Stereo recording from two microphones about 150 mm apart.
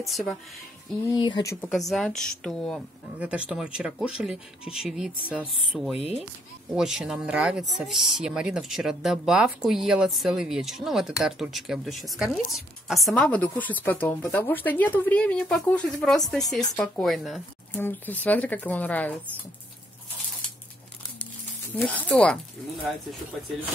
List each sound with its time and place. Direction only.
0.0 s speech: centre (ahead or behind)
1.1 s speech: 30° left (ahead or behind)
1.7 s speech: centre (ahead or behind)
3.2 s a woman's voice: 10° right (ahead or behind)
17.7 s a woman's voice: 15° left (ahead or behind)
21.7 s a woman's voice: 10° left (ahead or behind)